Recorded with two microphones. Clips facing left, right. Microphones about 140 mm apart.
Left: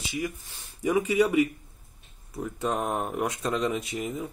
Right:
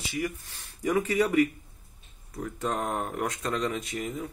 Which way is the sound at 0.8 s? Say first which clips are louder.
Left 2 dB; 10° left (ahead or behind).